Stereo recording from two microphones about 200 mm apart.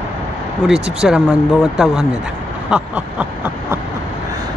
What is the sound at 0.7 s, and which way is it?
Speech, 5° right (ahead or behind).